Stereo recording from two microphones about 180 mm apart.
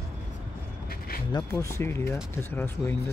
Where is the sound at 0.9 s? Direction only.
55° left (ahead or behind).